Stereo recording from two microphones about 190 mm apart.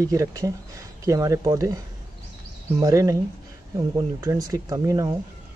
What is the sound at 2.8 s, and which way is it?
Speech, 15° right (ahead or behind).